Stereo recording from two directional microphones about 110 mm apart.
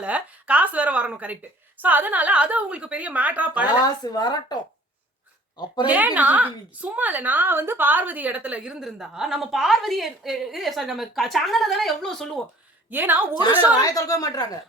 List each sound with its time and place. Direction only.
0.0 s a woman's voice: 10° right (ahead or behind)
3.8 s a woman's voice: 40° left (ahead or behind)
5.9 s a woman's voice: 15° right (ahead or behind); by 12.4 s 5° left (ahead or behind)
12.9 s a woman's voice: 20° right (ahead or behind)
13.7 s a woman's voice: 35° left (ahead or behind)